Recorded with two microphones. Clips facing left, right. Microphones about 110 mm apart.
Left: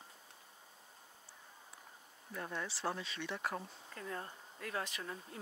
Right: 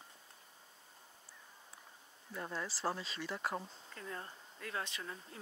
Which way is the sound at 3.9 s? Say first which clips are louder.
Left 2 dB; 40° left (ahead or behind).